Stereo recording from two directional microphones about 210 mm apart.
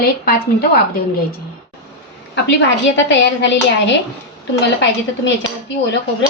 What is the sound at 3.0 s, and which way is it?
Speech, 55° left (ahead or behind).